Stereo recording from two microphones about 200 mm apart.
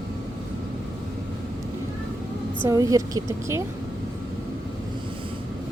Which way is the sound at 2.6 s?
15° right (ahead or behind).